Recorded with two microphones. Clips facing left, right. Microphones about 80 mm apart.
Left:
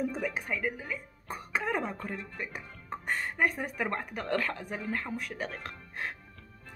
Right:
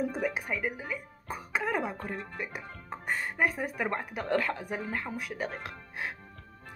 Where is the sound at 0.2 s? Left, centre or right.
Centre.